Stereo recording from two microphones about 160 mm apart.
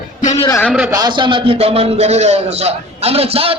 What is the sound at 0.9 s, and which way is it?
A man's voice, 25° right (ahead or behind).